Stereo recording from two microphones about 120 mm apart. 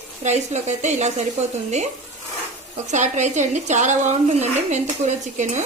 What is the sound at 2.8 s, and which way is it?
Speech, 80° right.